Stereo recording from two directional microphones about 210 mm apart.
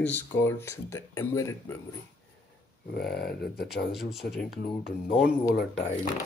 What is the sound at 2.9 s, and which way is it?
Speech, 50° left (ahead or behind).